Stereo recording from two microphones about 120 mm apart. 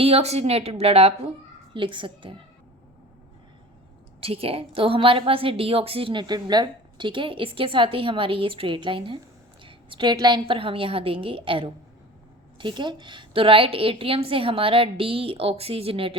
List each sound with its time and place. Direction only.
0.0 s a woman's voice: 60° right (ahead or behind)
1.7 s a woman's voice: 45° right (ahead or behind)
4.2 s a woman's voice: 55° right (ahead or behind)